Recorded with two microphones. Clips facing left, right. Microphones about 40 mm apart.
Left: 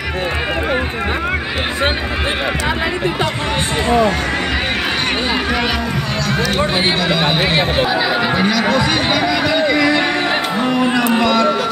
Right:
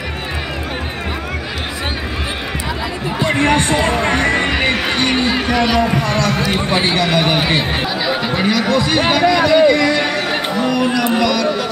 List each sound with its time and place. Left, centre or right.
5.1 s a sound: centre
5.5 s speech: centre
5.8 s speech: right
6.6 s speech: left
8.1 s chatter: centre
8.6 s speech: centre
10.5 s music: left
11.1 s speech: left